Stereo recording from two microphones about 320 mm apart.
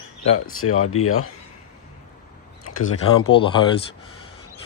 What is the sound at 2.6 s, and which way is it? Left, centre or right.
Speech, left.